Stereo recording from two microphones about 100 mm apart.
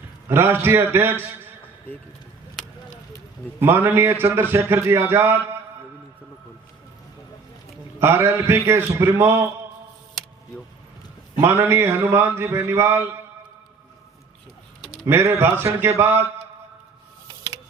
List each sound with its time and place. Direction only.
0.3 s mantra: 25° right (ahead or behind)
3.6 s mantra: 25° right (ahead or behind)
7.9 s mantra: 25° right (ahead or behind)
11.3 s mantra: 25° right (ahead or behind)
15.0 s mantra: 25° right (ahead or behind)